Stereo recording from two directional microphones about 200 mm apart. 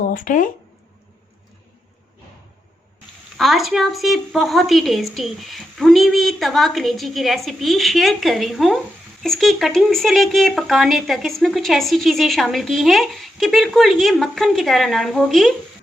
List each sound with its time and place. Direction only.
0.1 s speech: 40° left (ahead or behind)
3.3 s speech: centre (ahead or behind)